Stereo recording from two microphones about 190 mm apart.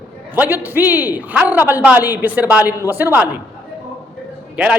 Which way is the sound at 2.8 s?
10° right (ahead or behind).